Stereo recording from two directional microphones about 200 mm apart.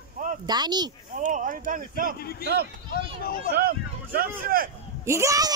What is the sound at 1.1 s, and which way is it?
Speech, 40° right (ahead or behind).